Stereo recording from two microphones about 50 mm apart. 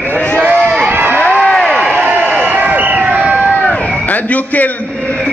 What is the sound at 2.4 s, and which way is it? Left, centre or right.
Crowd, right.